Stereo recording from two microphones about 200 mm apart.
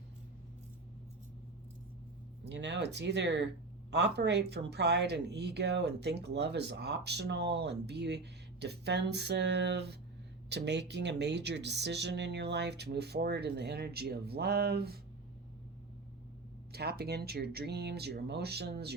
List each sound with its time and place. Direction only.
2.4 s speech: 60° right (ahead or behind)
16.7 s speech: 50° right (ahead or behind)